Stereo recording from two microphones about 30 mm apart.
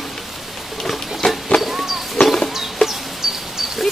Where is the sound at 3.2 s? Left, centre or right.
Centre.